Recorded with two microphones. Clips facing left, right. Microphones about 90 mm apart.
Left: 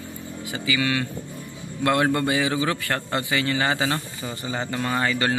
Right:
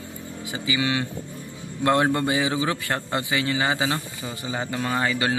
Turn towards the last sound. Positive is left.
turn(degrees=-5)  # may be behind; listen again after turning